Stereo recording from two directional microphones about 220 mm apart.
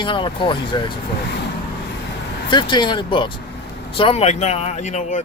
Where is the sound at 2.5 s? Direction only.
20° left (ahead or behind).